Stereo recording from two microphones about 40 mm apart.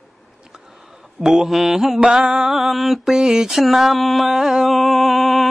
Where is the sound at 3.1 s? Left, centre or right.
Centre.